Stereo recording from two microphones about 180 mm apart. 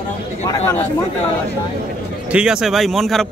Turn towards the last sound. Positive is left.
turn(degrees=0)  # may be behind; listen again after turning